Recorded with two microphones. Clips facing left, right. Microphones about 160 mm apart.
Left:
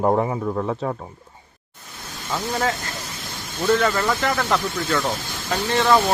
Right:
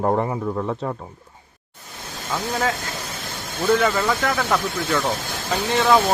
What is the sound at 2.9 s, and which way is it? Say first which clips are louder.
Vehicle: right 2 dB; 60° right (ahead or behind).